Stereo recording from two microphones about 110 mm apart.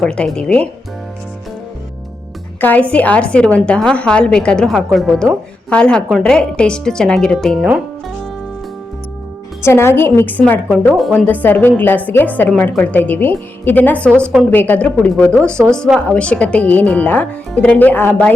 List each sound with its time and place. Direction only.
0.0 s a woman's voice: 5° left (ahead or behind)
2.6 s a woman's voice: 15° left (ahead or behind)
9.6 s a woman's voice: 25° left (ahead or behind)
15.6 s a woman's voice: 15° right (ahead or behind)
16.0 s a woman's voice: 10° left (ahead or behind)